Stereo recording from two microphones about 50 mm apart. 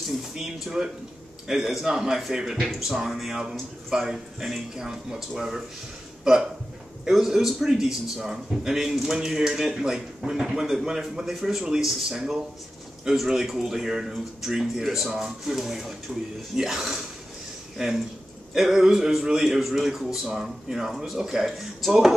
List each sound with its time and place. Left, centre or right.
0.0 s a man's voice: centre
16.1 s speech: centre
16.5 s a man's voice: centre